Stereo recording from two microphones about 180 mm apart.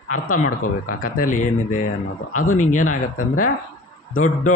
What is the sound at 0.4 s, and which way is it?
A man's voice, 50° left (ahead or behind).